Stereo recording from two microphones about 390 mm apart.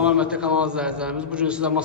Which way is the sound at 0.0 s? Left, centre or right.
Centre.